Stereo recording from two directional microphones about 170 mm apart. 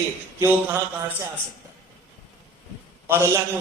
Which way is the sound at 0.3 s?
15° right (ahead or behind).